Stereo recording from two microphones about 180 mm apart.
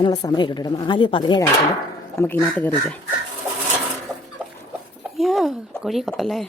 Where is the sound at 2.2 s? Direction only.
15° left (ahead or behind).